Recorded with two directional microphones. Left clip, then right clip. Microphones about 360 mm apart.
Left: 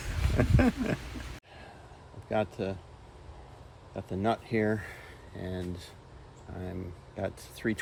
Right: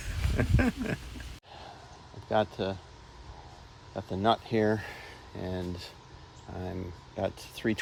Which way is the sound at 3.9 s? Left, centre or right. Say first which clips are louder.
Right 3 dB; centre.